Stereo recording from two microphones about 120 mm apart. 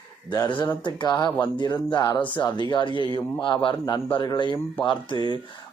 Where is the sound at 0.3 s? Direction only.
40° left (ahead or behind).